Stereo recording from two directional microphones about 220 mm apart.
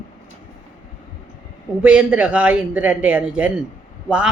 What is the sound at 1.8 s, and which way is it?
Speech, 5° right (ahead or behind).